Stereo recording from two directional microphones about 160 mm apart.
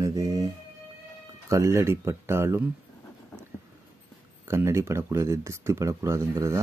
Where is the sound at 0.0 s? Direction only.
20° right (ahead or behind).